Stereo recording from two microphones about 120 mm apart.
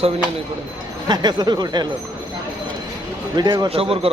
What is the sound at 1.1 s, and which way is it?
Speech, 35° right (ahead or behind).